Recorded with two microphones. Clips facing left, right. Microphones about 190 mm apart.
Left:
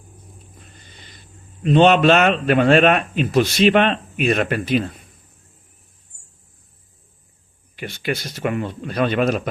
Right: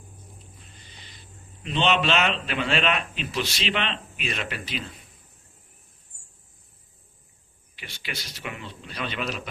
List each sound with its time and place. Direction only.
0.6 s a sound: 50° left (ahead or behind)
1.6 s a man's voice: 50° left (ahead or behind)
7.8 s a man's voice: 50° left (ahead or behind)